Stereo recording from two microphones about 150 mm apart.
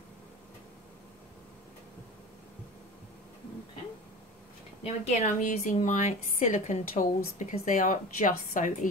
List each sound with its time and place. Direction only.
4.8 s a woman's voice: 50° left (ahead or behind)